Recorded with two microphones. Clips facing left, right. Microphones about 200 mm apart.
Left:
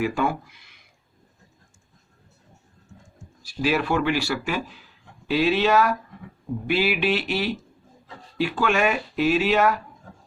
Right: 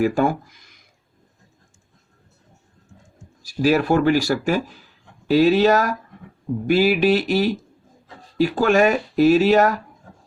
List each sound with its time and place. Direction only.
0.0 s speech: 45° right (ahead or behind)
3.4 s speech: 40° right (ahead or behind)